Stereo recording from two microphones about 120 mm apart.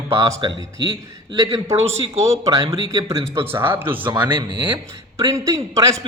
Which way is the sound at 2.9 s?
25° right (ahead or behind).